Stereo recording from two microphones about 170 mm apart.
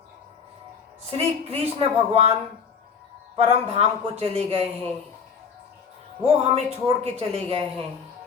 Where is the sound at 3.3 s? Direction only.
35° right (ahead or behind).